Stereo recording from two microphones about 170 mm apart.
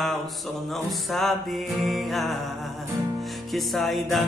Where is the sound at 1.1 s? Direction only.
Centre (ahead or behind).